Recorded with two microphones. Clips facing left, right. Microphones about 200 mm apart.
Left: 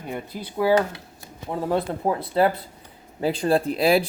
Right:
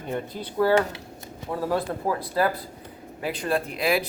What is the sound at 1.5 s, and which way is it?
Speech, 25° left (ahead or behind).